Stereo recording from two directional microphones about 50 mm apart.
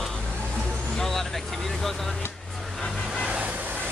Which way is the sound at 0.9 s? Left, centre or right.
Centre.